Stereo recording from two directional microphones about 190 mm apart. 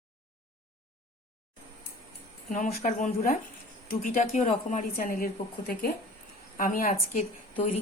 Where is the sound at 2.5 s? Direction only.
45° left (ahead or behind).